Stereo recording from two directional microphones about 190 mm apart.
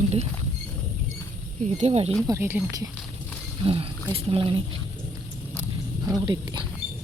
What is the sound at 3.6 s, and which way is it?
Speech, 30° right (ahead or behind).